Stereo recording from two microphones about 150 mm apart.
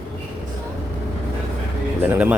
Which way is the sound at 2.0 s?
10° right (ahead or behind).